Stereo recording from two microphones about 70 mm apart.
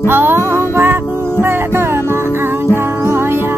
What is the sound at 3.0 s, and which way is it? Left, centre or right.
Music, right.